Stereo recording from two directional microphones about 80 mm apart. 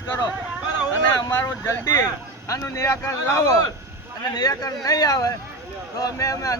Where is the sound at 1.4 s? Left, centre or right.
Left.